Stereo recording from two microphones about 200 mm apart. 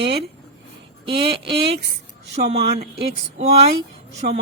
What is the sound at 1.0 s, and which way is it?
Speech, 25° right (ahead or behind).